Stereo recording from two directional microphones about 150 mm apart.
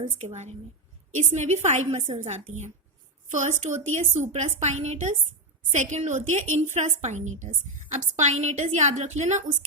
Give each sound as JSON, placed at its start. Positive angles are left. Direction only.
{"t": 0.2, "sound": "a woman's voice", "side_deg": -50}